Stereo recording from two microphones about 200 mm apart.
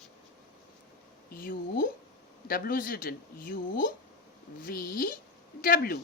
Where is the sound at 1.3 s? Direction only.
45° left (ahead or behind).